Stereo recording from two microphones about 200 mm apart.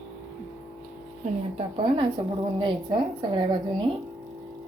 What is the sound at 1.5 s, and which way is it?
Speech, 25° right (ahead or behind).